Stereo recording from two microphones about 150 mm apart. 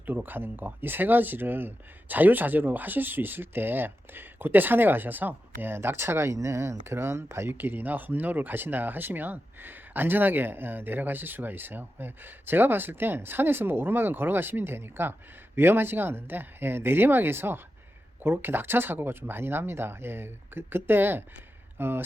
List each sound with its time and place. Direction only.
0.0 s speech: 10° right (ahead or behind)